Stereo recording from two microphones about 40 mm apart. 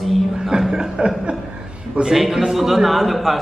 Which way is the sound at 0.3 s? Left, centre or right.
Centre.